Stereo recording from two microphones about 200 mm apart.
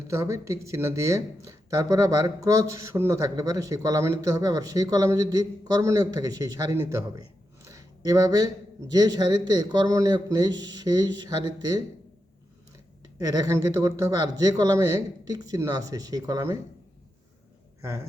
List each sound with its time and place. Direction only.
0.1 s speech: 15° right (ahead or behind)
13.1 s speech: 20° right (ahead or behind)